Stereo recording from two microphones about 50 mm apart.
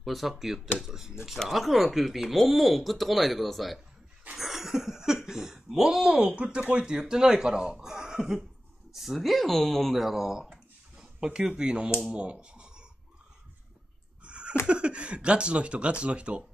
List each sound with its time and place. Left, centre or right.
0.0 s speech: centre
8.9 s speech: centre
11.0 s a sound: centre
11.4 s speech: centre
14.2 s a sound: right
14.7 s speech: right